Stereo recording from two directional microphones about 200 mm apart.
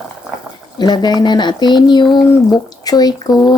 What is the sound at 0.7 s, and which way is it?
Speech, 20° left (ahead or behind).